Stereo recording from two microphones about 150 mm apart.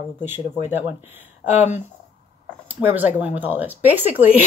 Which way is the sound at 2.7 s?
10° right (ahead or behind).